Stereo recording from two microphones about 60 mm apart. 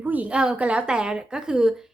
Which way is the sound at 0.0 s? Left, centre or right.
Right.